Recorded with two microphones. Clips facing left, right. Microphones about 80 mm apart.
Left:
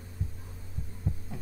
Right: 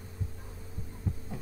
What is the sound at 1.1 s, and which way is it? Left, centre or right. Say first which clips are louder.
Heart sounds: left 1 dB; centre.